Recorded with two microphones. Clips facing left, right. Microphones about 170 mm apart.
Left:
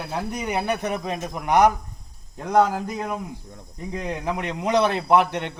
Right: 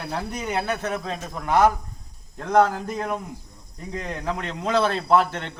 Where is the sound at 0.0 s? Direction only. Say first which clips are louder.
Left 1 dB; 10° left (ahead or behind).